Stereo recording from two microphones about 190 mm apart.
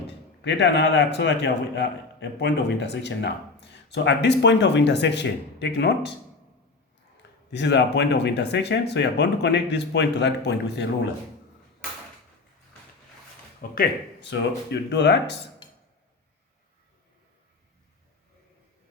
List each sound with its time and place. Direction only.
0.4 s speech: 65° left (ahead or behind)
7.5 s speech: 65° left (ahead or behind)
13.6 s speech: 55° left (ahead or behind)